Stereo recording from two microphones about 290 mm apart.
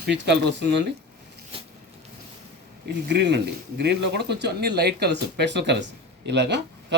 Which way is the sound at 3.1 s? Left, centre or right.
Right.